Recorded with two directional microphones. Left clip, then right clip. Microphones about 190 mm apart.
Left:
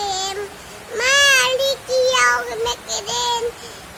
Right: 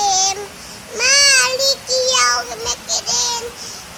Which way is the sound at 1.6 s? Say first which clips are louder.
Right 1 dB; 25° left (ahead or behind).